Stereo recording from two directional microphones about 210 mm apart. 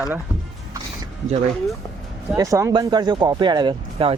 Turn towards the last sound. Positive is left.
turn(degrees=-25)  # may be behind; listen again after turning